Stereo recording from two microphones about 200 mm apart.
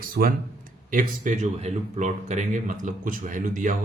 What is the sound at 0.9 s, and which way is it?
Speech, 40° right (ahead or behind).